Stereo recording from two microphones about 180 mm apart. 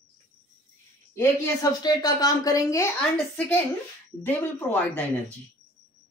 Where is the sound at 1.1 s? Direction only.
20° left (ahead or behind).